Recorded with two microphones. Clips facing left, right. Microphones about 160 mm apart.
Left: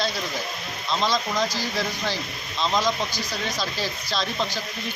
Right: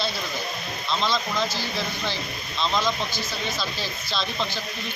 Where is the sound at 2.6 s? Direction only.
15° left (ahead or behind).